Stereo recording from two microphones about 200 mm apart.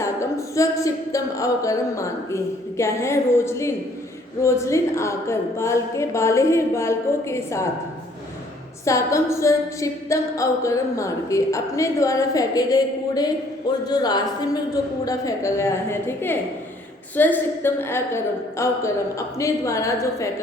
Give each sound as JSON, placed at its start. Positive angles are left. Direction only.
{"t": 0.0, "sound": "a woman's voice", "side_deg": 15}
{"t": 8.8, "sound": "a woman's voice", "side_deg": 15}